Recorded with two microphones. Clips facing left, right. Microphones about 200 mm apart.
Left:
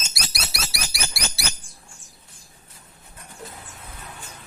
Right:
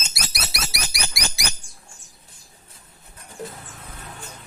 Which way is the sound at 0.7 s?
20° right (ahead or behind).